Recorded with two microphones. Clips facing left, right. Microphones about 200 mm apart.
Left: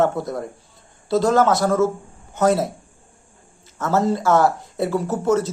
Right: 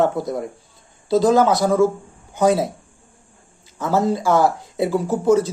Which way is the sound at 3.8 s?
Centre (ahead or behind).